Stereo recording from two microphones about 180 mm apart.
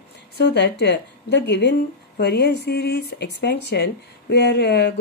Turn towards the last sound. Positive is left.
turn(degrees=65)  # may be behind; listen again after turning